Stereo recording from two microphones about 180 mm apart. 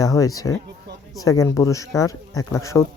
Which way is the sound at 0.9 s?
70° right (ahead or behind).